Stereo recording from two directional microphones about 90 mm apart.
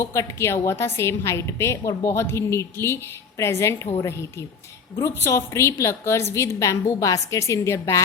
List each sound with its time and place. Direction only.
0.0 s a woman's voice: 35° left (ahead or behind)